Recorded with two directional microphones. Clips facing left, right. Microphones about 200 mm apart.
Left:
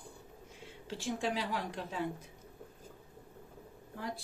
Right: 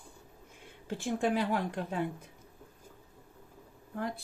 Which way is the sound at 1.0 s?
55° right (ahead or behind).